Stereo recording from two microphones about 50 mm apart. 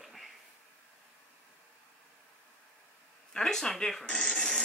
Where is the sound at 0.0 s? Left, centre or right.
Centre.